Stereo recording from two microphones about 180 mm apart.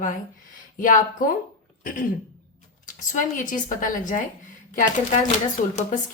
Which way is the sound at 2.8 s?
45° left (ahead or behind).